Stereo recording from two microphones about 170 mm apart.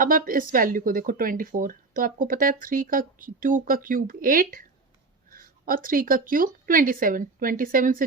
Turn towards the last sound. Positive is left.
turn(degrees=-55)  # may be behind; listen again after turning